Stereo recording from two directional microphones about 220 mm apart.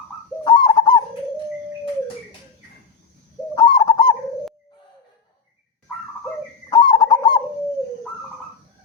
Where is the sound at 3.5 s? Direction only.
20° left (ahead or behind).